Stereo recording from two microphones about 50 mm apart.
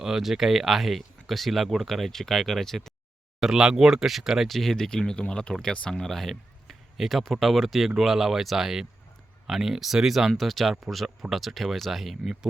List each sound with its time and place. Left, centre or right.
0.0 s speech: centre
3.4 s speech: centre
4.4 s speech: centre
6.0 s speech: centre